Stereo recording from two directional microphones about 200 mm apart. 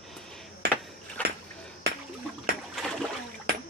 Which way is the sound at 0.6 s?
55° right (ahead or behind).